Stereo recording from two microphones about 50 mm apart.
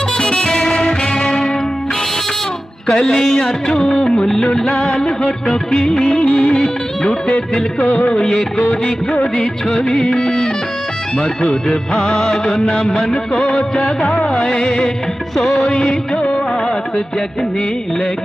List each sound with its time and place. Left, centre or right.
0.2 s music: centre
2.9 s music of bollywood: centre
4.4 s music of bollywood: centre
6.2 s music: centre
8.0 s music of bollywood: centre
14.0 s music: centre
14.4 s music of bollywood: centre
15.3 s music of bollywood: centre
15.7 s music of bollywood: centre